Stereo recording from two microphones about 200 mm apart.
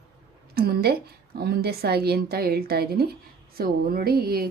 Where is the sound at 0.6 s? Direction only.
50° right (ahead or behind).